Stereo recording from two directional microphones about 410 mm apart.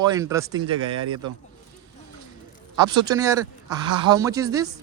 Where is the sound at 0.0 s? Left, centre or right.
Centre.